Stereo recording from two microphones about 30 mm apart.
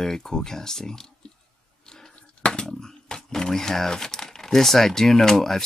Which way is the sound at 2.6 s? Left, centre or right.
Centre.